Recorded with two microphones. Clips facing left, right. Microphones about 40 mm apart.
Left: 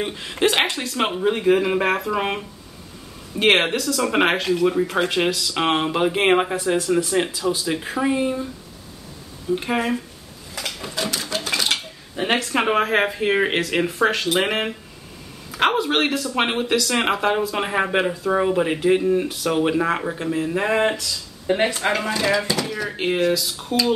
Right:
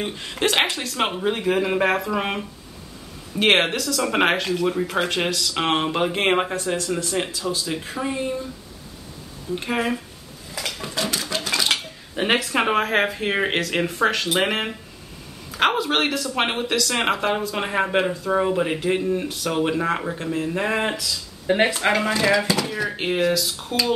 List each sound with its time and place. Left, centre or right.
0.0 s speech: centre
9.6 s speech: centre
10.5 s a sound: centre
12.4 s a man's voice: centre
21.5 s speech: centre